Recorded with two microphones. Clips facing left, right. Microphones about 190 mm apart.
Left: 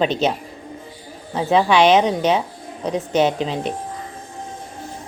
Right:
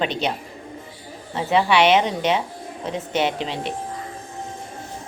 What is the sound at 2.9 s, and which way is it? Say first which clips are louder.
Speech: left 5 dB; 40° left (ahead or behind).